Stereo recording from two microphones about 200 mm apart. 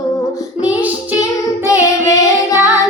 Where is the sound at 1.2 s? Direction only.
15° left (ahead or behind).